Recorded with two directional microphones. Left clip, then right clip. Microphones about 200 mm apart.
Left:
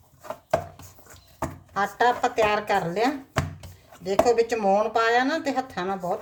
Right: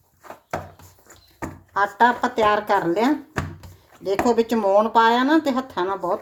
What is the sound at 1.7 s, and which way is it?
Speech, 20° right (ahead or behind).